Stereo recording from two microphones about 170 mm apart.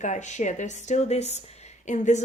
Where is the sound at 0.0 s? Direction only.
45° left (ahead or behind).